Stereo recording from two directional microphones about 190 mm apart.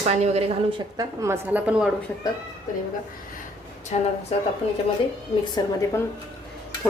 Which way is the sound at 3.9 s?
35° left (ahead or behind).